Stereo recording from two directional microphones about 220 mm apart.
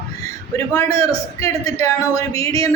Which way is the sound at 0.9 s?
25° right (ahead or behind).